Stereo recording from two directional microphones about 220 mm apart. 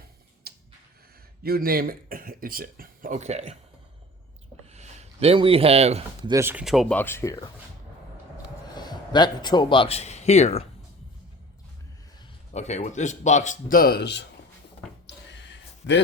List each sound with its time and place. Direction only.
0.4 s a sound: 45° right (ahead or behind)
1.5 s speech: 45° right (ahead or behind)
4.7 s speech: 30° right (ahead or behind)
6.3 s speech: 10° right (ahead or behind); by 7.5 s 15° left (ahead or behind)
8.6 s a man's voice: 20° left (ahead or behind)
12.5 s a man's voice: 30° left (ahead or behind); by 14.3 s 50° left (ahead or behind)
15.0 s a sound: 55° left (ahead or behind)